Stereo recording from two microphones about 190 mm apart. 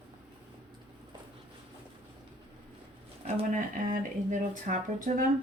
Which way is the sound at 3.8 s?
40° right (ahead or behind).